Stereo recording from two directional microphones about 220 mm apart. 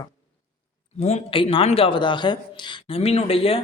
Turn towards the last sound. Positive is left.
turn(degrees=25)  # may be behind; listen again after turning